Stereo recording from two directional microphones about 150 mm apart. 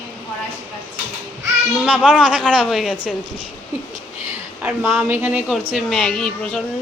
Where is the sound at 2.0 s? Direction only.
5° right (ahead or behind).